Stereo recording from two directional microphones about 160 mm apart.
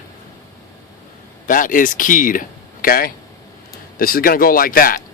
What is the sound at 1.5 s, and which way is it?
Speech, 55° left (ahead or behind).